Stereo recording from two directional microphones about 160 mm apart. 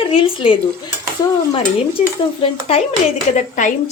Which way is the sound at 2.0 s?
40° left (ahead or behind).